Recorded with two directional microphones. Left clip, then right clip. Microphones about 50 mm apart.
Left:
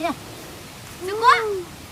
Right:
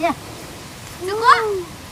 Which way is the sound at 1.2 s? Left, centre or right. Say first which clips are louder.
Right 2 dB; centre.